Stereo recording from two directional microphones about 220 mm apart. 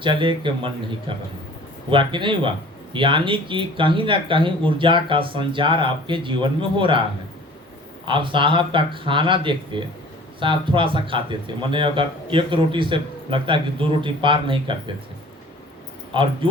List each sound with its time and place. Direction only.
0.0 s speech: 20° right (ahead or behind)
8.0 s speech: 20° right (ahead or behind)
16.1 s speech: 25° right (ahead or behind)